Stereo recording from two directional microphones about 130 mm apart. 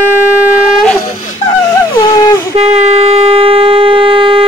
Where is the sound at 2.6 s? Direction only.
55° right (ahead or behind).